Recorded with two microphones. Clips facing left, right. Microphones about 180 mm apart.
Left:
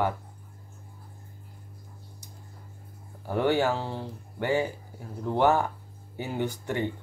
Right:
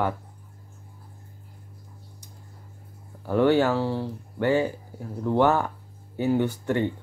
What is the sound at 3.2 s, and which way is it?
Speech, 15° left (ahead or behind).